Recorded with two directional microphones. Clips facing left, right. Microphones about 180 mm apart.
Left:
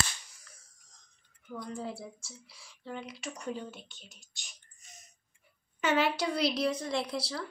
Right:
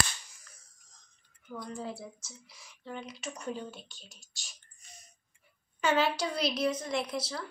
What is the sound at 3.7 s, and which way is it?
Speech, 20° left (ahead or behind).